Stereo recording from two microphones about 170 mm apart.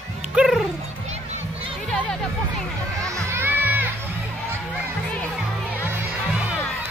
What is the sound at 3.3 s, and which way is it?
Music, 10° right (ahead or behind).